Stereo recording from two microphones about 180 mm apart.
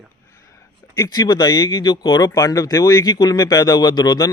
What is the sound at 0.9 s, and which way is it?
Speech, 20° left (ahead or behind).